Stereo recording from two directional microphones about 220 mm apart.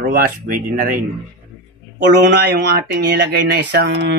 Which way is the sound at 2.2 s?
50° right (ahead or behind).